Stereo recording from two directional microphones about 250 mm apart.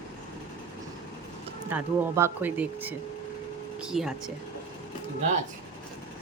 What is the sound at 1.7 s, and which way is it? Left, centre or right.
Speech, centre.